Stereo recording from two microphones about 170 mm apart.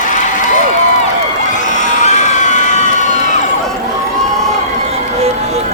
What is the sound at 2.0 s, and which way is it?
Emergency vehicle, 45° left (ahead or behind).